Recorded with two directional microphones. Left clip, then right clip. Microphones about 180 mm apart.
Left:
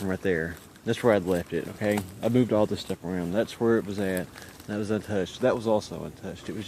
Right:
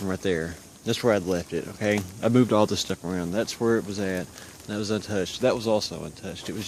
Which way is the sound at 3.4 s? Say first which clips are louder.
Even; 5° right (ahead or behind).